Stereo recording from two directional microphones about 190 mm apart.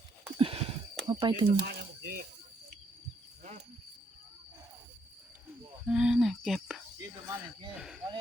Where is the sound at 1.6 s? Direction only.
50° right (ahead or behind).